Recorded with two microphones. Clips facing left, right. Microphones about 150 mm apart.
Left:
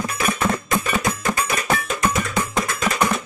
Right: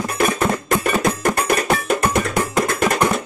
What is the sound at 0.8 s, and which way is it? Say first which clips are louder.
Music: right 4 dB; 55° right (ahead or behind).